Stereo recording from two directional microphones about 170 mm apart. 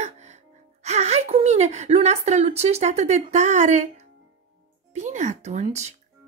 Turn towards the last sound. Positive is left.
turn(degrees=-40)  # may be behind; listen again after turning